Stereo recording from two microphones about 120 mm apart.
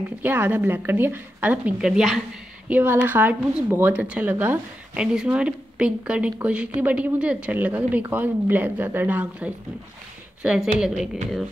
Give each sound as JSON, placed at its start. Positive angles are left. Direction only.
{"t": 0.2, "sound": "a woman's voice", "side_deg": -15}
{"t": 2.7, "sound": "a woman's voice", "side_deg": -15}